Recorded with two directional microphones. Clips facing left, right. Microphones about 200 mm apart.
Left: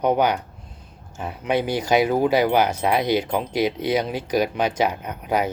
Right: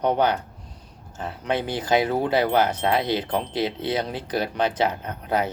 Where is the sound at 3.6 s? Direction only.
25° right (ahead or behind).